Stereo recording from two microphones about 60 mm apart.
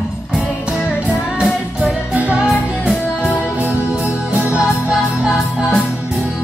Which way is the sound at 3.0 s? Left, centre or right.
Left.